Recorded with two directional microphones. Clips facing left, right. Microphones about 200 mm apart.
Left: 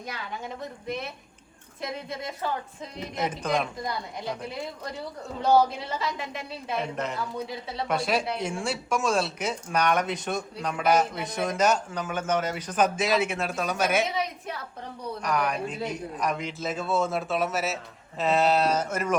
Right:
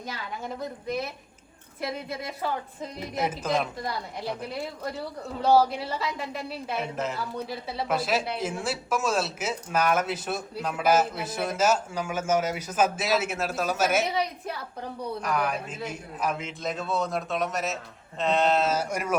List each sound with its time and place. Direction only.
0.6 s speech: centre (ahead or behind)
3.2 s speech: 5° right (ahead or behind)
15.8 s speech: 35° left (ahead or behind)
16.1 s speech: centre (ahead or behind)